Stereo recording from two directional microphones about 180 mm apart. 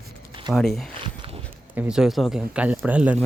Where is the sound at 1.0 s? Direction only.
30° right (ahead or behind).